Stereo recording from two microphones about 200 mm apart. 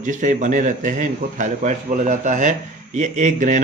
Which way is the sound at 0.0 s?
40° right (ahead or behind).